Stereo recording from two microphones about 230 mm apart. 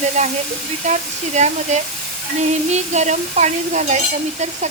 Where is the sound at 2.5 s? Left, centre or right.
Right.